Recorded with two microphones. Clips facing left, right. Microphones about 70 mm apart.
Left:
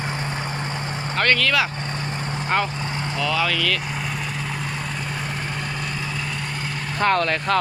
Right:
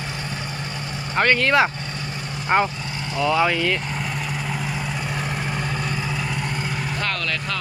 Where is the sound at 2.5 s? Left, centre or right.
Centre.